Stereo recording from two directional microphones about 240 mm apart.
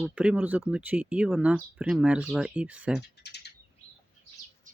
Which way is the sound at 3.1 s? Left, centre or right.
Left.